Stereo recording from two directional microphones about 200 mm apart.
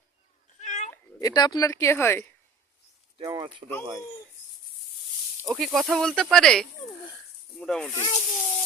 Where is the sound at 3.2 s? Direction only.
25° right (ahead or behind).